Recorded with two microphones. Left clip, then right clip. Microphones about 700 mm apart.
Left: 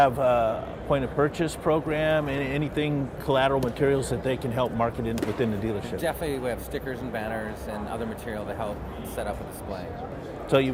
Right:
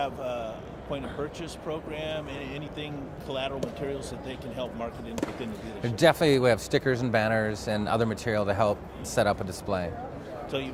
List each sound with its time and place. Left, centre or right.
0.0 s a man's voice: left
6.0 s speech: right